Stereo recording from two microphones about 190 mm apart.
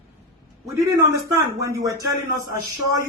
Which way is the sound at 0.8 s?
15° right (ahead or behind).